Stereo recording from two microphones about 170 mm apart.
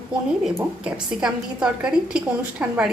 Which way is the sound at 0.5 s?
5° right (ahead or behind).